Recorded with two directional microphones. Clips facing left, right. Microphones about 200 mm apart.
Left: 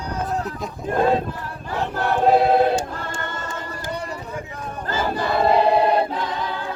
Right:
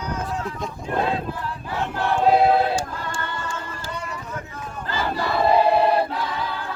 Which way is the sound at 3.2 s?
45° left (ahead or behind).